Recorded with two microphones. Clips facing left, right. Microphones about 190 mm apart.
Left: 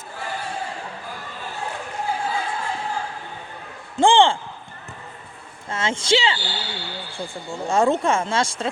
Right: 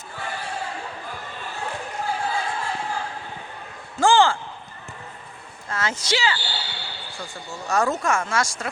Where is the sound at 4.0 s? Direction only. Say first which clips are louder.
Left 2 dB; 25° left (ahead or behind).